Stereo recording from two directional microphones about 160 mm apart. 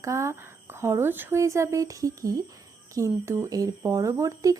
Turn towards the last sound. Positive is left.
turn(degrees=-20)  # may be behind; listen again after turning